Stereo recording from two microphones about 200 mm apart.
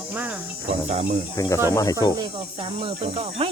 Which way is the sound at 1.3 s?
15° left (ahead or behind).